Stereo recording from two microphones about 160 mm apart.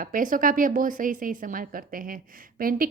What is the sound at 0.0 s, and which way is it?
Speech, 55° right (ahead or behind).